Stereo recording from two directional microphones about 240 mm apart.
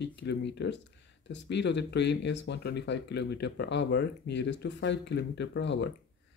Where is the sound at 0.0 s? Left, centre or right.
Left.